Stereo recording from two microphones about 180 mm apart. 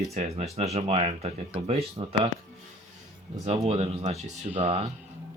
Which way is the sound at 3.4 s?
35° right (ahead or behind).